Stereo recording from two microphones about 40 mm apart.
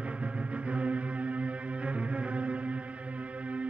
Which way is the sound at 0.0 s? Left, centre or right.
Right.